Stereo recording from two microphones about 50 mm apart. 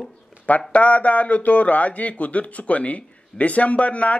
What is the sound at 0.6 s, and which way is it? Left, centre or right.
Speech, left.